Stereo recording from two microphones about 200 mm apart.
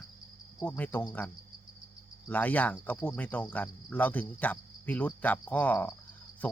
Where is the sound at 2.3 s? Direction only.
10° left (ahead or behind).